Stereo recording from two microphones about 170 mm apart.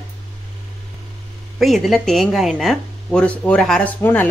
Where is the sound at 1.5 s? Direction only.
Centre (ahead or behind).